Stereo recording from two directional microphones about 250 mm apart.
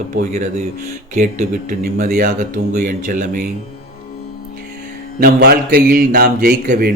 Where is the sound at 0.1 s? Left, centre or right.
Right.